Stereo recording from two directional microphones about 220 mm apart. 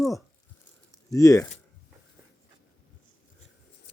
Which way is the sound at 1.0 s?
15° left (ahead or behind).